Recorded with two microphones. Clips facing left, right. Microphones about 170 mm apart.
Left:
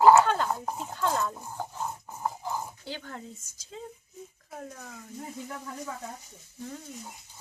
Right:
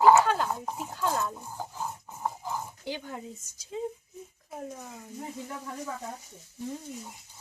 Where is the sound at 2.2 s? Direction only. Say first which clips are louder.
Left 1 dB; centre (ahead or behind).